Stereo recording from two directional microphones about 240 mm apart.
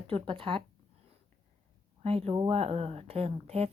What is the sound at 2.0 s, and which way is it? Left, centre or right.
A woman's voice, right.